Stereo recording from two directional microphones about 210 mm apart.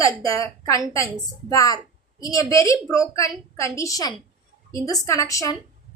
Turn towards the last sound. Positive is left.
turn(degrees=15)  # may be behind; listen again after turning